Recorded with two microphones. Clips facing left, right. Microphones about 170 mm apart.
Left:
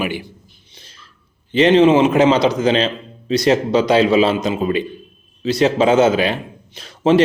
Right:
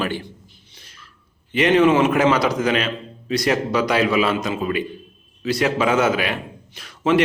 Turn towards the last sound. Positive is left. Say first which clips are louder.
# left 4 dB
turn(degrees=30)  # may be behind; listen again after turning